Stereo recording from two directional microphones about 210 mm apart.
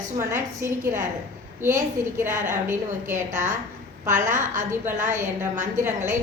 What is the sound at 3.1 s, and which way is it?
A woman's voice, 35° right (ahead or behind).